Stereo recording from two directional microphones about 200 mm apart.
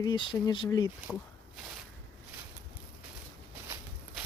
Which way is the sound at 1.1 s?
5° left (ahead or behind).